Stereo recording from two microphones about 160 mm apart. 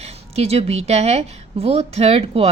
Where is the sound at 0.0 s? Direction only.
40° right (ahead or behind).